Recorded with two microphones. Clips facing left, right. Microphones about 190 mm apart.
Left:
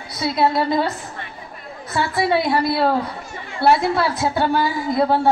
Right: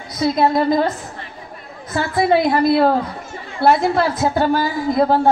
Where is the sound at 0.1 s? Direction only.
45° right (ahead or behind).